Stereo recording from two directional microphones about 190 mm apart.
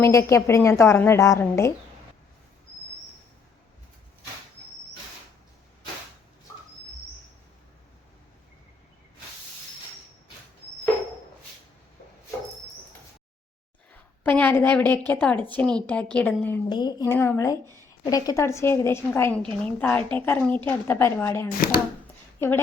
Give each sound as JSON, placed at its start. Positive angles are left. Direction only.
{"t": 0.0, "sound": "a woman's voice", "side_deg": 15}
{"t": 14.3, "sound": "a woman's voice", "side_deg": 10}
{"t": 16.6, "sound": "a woman's voice", "side_deg": 20}